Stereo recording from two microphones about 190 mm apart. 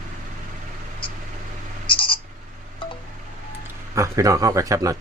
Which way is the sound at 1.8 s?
25° left (ahead or behind).